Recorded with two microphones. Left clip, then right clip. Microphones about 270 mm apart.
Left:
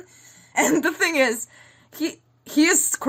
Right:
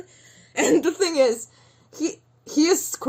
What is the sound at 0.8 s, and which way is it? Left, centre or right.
A woman's voice, left.